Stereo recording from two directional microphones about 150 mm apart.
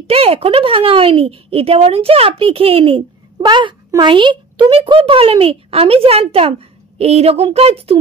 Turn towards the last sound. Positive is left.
turn(degrees=-40)  # may be behind; listen again after turning